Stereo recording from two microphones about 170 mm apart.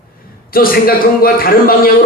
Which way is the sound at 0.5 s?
60° left (ahead or behind).